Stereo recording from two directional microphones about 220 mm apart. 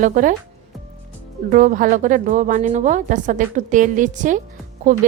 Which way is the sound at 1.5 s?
35° right (ahead or behind).